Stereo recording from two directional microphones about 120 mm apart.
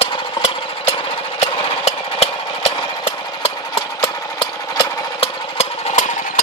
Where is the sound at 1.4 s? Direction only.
60° left (ahead or behind).